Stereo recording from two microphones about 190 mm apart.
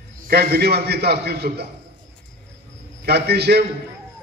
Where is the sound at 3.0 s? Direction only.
55° right (ahead or behind).